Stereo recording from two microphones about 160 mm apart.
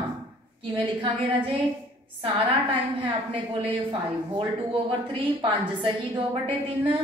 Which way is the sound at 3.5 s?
30° right (ahead or behind).